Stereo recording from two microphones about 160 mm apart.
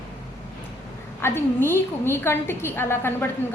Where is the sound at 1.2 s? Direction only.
15° left (ahead or behind).